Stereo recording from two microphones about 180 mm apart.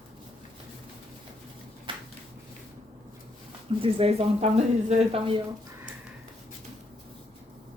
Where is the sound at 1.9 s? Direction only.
30° right (ahead or behind).